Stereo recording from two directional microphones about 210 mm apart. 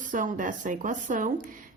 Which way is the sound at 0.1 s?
40° right (ahead or behind).